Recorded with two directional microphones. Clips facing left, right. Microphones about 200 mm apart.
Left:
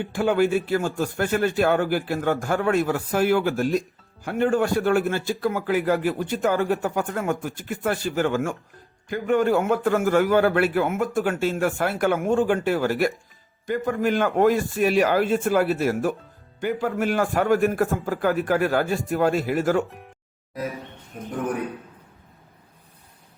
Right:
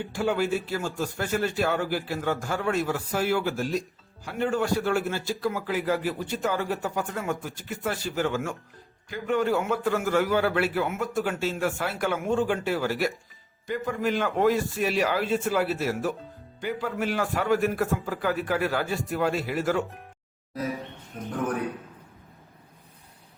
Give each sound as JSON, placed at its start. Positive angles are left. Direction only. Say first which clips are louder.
{"t": 0.1, "sound": "a man's voice", "louder": "left 5 dB", "side_deg": 55}